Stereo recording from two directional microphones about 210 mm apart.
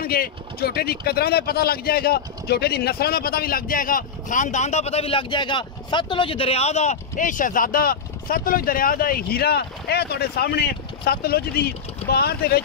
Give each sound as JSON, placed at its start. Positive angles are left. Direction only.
{"t": 0.0, "sound": "speech", "side_deg": 45}